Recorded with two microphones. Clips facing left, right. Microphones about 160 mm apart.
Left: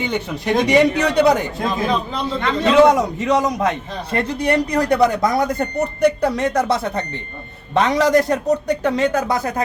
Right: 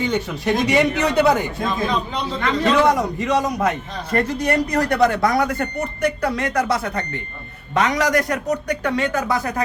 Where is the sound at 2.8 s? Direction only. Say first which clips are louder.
Left 4 dB; 20° left (ahead or behind).